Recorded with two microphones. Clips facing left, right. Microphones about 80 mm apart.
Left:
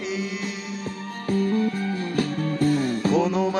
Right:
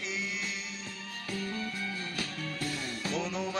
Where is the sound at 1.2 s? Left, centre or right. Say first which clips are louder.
Left 14 dB; left.